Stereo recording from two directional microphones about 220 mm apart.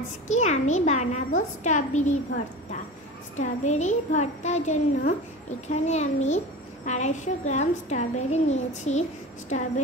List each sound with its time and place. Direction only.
0.3 s a child's voice: 30° left (ahead or behind)